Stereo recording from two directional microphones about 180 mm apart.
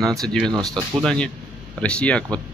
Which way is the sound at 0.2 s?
Centre (ahead or behind).